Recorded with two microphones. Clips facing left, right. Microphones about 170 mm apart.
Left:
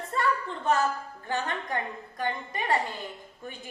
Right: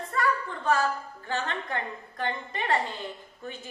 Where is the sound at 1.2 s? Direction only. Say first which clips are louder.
Left 1 dB; 15° left (ahead or behind).